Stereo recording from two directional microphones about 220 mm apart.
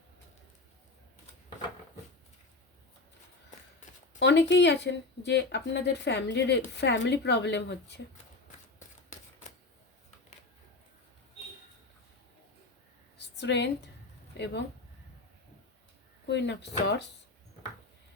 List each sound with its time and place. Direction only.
4.2 s speech: 50° left (ahead or behind)
13.1 s a sound: 50° left (ahead or behind)
14.3 s speech: 50° left (ahead or behind)
16.2 s speech: 50° left (ahead or behind)